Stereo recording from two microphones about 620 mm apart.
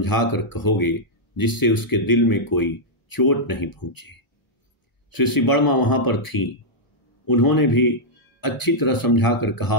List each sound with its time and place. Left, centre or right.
0.0 s speech: left